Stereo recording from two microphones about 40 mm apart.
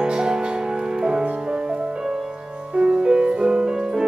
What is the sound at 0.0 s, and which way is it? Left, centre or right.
Music, centre.